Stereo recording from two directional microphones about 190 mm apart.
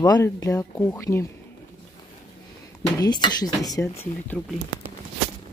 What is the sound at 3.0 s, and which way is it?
Speech, 20° left (ahead or behind).